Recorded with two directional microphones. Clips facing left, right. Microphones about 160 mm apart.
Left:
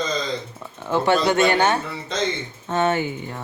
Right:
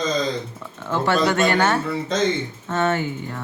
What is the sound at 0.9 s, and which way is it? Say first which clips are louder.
Speech: left 1 dB; 20° left (ahead or behind).